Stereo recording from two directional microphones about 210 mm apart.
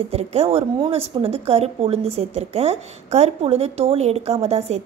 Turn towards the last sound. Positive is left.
turn(degrees=-30)  # may be behind; listen again after turning